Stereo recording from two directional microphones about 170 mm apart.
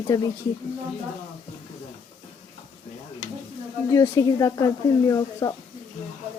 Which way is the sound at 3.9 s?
20° left (ahead or behind).